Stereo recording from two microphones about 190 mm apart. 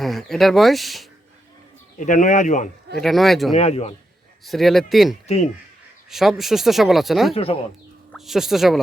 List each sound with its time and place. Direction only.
0.0 s speech: centre (ahead or behind)
2.0 s speech: 40° left (ahead or behind)
2.9 s speech: centre (ahead or behind)
3.6 s speech: 35° left (ahead or behind)
4.4 s speech: centre (ahead or behind)